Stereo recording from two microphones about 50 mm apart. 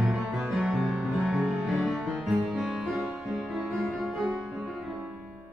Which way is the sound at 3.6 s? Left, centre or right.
Centre.